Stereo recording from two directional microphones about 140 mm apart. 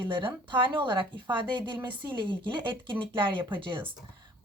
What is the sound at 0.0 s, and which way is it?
Speech, 35° right (ahead or behind).